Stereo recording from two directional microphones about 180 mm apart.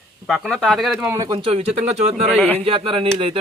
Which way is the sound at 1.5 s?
35° right (ahead or behind).